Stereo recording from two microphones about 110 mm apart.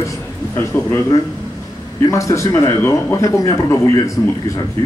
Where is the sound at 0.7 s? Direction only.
20° left (ahead or behind).